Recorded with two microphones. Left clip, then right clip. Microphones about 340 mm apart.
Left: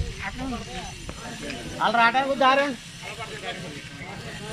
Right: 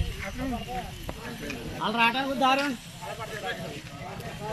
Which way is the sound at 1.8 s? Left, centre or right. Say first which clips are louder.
Left 5 dB; centre.